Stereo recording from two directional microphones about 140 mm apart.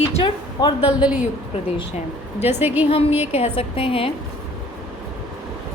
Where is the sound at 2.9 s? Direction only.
45° left (ahead or behind).